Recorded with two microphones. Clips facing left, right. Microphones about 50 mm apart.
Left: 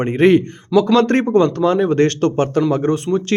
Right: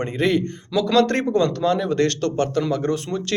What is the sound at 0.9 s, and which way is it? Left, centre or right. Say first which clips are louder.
Speech: left 1 dB; left.